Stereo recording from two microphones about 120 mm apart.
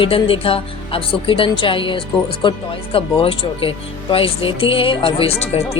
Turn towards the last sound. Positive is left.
turn(degrees=55)  # may be behind; listen again after turning